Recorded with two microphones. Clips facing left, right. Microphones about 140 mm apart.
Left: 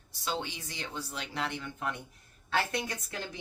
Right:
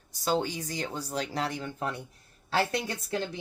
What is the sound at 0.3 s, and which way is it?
Speech, 40° right (ahead or behind).